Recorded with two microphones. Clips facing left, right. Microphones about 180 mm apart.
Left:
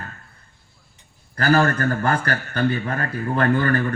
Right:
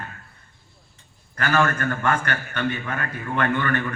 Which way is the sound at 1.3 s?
35° left (ahead or behind).